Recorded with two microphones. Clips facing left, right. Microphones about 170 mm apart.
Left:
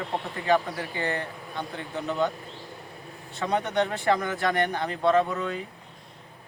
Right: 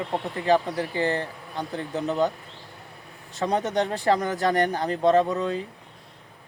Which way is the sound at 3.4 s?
35° right (ahead or behind).